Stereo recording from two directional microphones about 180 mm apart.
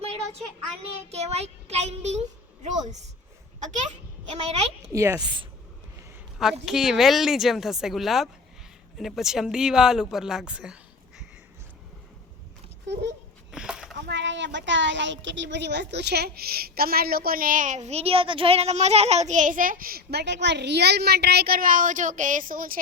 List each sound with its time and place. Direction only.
0.8 s a child's voice: 35° right (ahead or behind)
4.9 s a woman's voice: 20° right (ahead or behind)
6.4 s speech: centre (ahead or behind)
13.5 s a sound: 5° right (ahead or behind)
14.1 s a woman's voice: 80° right; by 22.8 s 50° right (ahead or behind)